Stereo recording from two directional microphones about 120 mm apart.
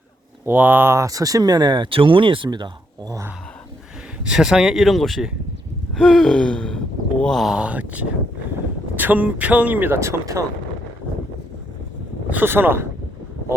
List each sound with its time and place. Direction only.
0.4 s speech: 15° right (ahead or behind)
4.2 s speech: 5° right (ahead or behind)
5.9 s gasp: 5° left (ahead or behind)
9.0 s speech: 15° right (ahead or behind)
12.3 s speech: 15° right (ahead or behind)